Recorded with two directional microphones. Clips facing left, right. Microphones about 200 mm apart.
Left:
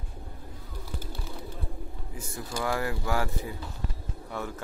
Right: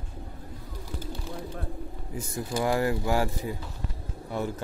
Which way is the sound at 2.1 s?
20° right (ahead or behind).